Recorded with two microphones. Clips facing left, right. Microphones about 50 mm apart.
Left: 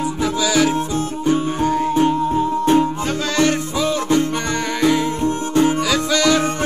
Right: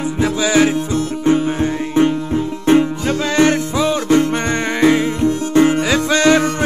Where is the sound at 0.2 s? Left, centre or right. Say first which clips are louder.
Right 4 dB; right.